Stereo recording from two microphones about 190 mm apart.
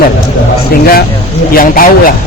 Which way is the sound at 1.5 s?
45° left (ahead or behind).